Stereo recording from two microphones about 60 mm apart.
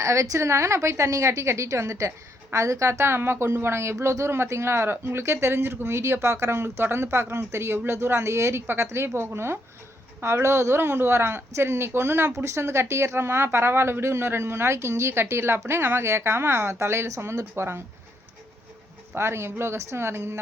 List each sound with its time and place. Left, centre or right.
0.0 s a woman's voice: right
3.0 s speech: right
19.1 s speech: right